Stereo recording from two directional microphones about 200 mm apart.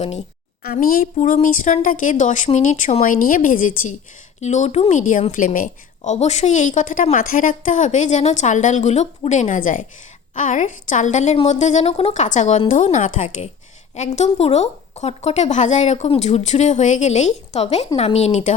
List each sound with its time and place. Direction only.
0.6 s speech: 50° left (ahead or behind)